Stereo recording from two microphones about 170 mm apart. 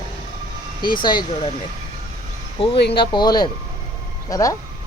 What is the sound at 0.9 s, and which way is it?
Speech, 25° left (ahead or behind).